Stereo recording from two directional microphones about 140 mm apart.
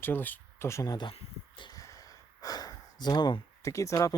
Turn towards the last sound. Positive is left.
turn(degrees=20)  # may be behind; listen again after turning